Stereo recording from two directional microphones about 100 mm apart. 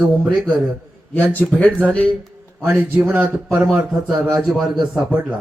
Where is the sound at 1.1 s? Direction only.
15° left (ahead or behind).